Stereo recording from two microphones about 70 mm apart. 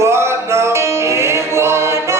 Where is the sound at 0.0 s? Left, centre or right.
Right.